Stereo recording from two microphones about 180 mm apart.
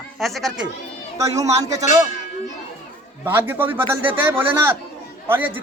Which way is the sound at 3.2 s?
10° right (ahead or behind).